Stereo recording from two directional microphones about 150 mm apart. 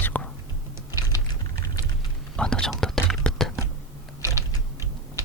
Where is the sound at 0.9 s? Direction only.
25° left (ahead or behind).